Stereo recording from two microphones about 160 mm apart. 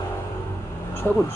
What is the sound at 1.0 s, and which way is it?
Speech, 15° left (ahead or behind).